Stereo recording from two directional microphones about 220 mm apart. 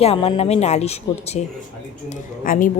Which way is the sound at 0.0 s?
25° left (ahead or behind).